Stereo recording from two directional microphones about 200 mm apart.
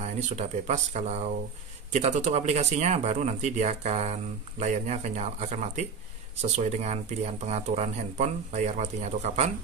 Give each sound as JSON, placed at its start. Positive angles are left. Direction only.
{"t": 0.0, "sound": "speech", "side_deg": -35}